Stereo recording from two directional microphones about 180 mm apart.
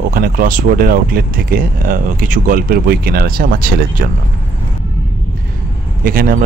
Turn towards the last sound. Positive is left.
turn(degrees=-55)  # may be behind; listen again after turning